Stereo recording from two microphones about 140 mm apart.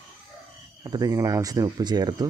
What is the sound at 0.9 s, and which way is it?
Speech, 25° right (ahead or behind).